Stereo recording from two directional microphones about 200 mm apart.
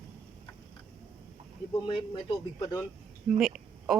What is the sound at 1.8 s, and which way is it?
Speech, 25° left (ahead or behind).